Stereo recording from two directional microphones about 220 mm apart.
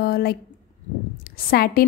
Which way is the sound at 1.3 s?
45° left (ahead or behind).